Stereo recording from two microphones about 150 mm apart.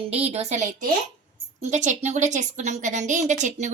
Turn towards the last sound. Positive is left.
turn(degrees=-55)  # may be behind; listen again after turning